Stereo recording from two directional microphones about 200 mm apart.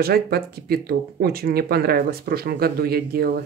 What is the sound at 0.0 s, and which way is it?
Speech, 50° right (ahead or behind).